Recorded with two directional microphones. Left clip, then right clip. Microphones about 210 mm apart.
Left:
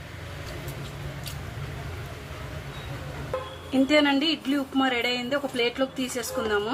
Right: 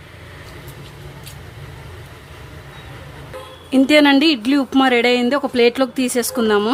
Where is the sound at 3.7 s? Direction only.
50° right (ahead or behind).